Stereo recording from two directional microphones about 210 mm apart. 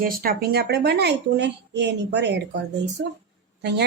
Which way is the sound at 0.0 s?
45° right (ahead or behind).